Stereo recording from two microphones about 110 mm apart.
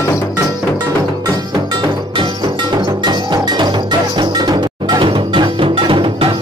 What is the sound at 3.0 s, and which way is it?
Music, 40° right (ahead or behind).